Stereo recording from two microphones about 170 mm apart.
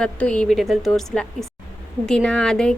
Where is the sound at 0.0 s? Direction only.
5° left (ahead or behind).